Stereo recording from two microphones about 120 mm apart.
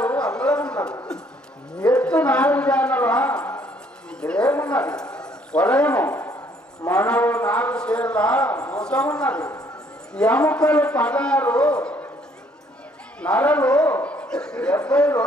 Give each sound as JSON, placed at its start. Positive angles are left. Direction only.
{"t": 0.0, "sound": "a sound", "side_deg": 10}
{"t": 10.1, "sound": "a man's voice", "side_deg": 10}
{"t": 13.2, "sound": "a man's voice", "side_deg": 10}